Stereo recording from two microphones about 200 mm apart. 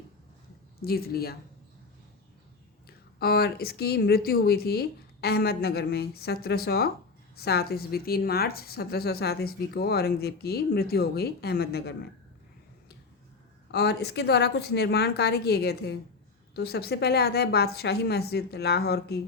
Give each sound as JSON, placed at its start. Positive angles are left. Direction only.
{"t": 0.8, "sound": "a woman's voice", "side_deg": 50}
{"t": 2.8, "sound": "a woman's voice", "side_deg": 50}
{"t": 13.7, "sound": "a woman's voice", "side_deg": 55}